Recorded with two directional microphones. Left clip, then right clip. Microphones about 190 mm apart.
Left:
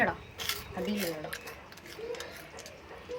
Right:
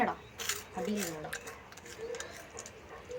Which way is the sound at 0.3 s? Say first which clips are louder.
Left 2 dB; 15° right (ahead or behind).